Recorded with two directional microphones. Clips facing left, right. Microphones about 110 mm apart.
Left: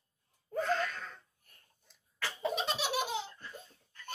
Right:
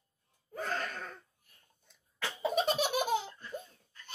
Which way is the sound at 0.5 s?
50° right (ahead or behind).